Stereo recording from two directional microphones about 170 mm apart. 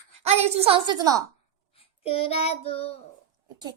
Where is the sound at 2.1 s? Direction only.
35° left (ahead or behind).